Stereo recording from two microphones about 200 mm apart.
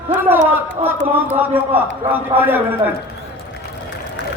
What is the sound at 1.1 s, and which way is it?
A man's voice, 10° right (ahead or behind).